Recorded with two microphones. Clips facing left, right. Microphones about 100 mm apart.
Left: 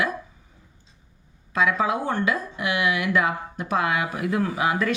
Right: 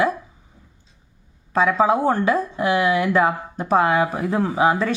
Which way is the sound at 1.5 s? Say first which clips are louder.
Right 5 dB; 30° right (ahead or behind).